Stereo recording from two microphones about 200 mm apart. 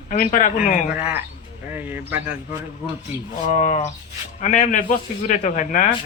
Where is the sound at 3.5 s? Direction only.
35° left (ahead or behind).